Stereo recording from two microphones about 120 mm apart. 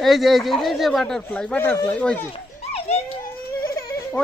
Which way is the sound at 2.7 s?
60° left (ahead or behind).